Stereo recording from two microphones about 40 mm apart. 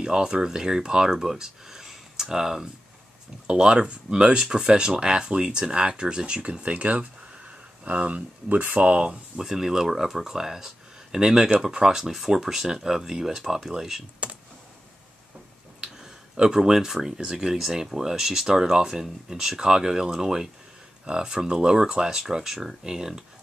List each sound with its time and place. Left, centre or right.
0.0 s speech: centre; by 8.8 s right
8.8 s speech: right
9.4 s speech: centre
15.8 s a sound: centre
17.2 s speech: centre